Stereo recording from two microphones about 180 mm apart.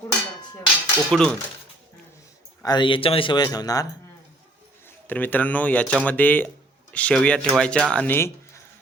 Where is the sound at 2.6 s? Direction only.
25° left (ahead or behind).